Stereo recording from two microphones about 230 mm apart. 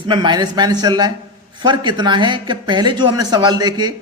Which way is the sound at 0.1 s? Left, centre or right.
Centre.